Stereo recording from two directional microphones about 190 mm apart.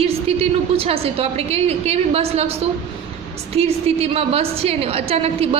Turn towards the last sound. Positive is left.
turn(degrees=-30)  # may be behind; listen again after turning